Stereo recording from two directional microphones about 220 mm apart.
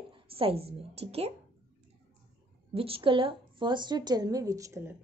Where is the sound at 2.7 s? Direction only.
25° right (ahead or behind).